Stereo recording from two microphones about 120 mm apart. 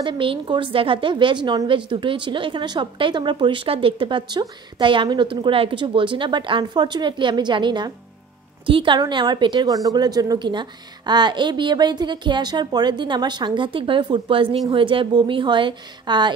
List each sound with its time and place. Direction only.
0.0 s a woman's voice: 45° right (ahead or behind)